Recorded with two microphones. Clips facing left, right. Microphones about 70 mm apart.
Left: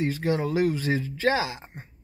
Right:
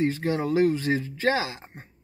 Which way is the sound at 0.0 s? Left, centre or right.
Right.